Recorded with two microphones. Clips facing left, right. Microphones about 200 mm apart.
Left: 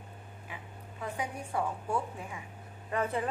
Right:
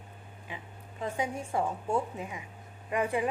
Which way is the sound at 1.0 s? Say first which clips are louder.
Right 4 dB; 25° right (ahead or behind).